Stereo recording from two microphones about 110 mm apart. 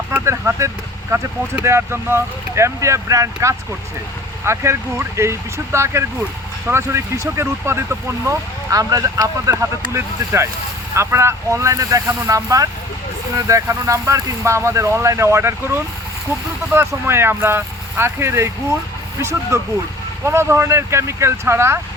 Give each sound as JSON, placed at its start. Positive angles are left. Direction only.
{"t": 0.3, "sound": "speech", "side_deg": -25}